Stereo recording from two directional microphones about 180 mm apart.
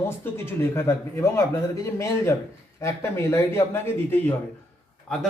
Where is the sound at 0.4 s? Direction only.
15° left (ahead or behind).